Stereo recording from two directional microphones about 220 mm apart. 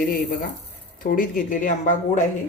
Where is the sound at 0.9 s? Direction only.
40° left (ahead or behind).